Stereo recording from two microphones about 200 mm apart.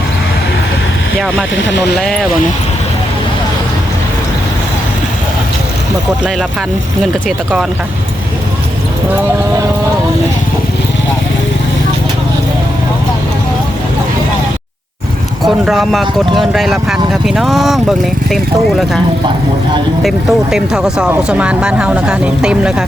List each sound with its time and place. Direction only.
1.5 s speech: 65° left (ahead or behind)
2.0 s speech: centre (ahead or behind)
7.0 s speech: centre (ahead or behind)
15.4 s speech: centre (ahead or behind)
20.0 s speech: centre (ahead or behind)